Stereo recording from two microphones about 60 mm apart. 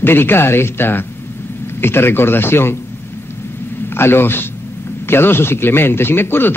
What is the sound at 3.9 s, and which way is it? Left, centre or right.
Speech, left.